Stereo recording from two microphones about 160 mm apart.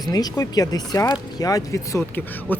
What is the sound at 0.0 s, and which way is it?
Speech, 25° left (ahead or behind).